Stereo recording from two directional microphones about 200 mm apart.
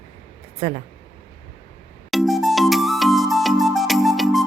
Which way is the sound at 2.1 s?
Centre (ahead or behind).